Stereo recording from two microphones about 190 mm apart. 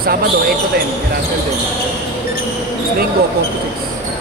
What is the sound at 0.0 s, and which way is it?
Speech, 50° right (ahead or behind).